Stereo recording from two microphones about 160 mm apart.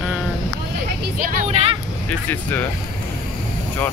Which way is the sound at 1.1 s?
50° right (ahead or behind).